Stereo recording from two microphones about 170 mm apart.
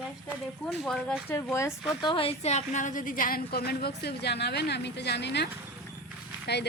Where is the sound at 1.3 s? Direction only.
15° left (ahead or behind).